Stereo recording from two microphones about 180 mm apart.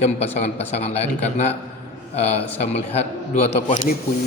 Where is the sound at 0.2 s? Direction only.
35° left (ahead or behind).